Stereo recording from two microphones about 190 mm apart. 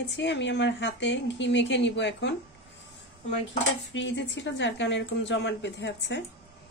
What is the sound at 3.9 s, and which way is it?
A woman's voice, 70° left (ahead or behind).